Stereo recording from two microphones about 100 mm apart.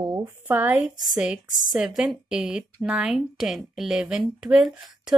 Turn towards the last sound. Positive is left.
turn(degrees=-5)  # may be behind; listen again after turning